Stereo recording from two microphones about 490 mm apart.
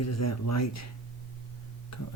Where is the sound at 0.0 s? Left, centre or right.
Left.